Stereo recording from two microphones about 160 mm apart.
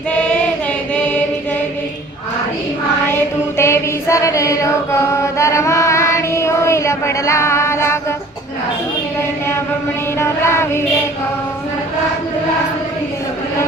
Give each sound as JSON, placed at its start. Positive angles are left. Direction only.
{"t": 3.6, "sound": "chant", "side_deg": 15}
{"t": 10.2, "sound": "music", "side_deg": 15}